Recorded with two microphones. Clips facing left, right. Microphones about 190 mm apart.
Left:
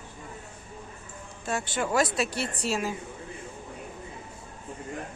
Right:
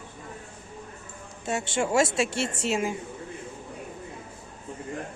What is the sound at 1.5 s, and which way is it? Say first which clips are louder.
Speech: right 2 dB; 25° right (ahead or behind).